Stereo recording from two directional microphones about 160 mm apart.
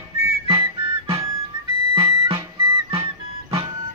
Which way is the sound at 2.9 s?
35° right (ahead or behind).